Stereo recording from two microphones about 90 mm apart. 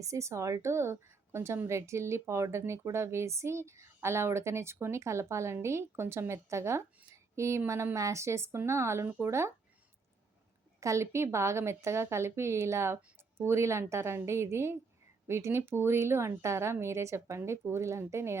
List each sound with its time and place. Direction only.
0.0 s a woman's voice: 35° right (ahead or behind)
9.0 s speech: 20° right (ahead or behind)
10.8 s a woman's voice: 35° right (ahead or behind)